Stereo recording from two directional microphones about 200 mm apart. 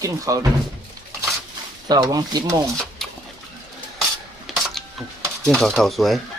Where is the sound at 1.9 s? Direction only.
20° right (ahead or behind).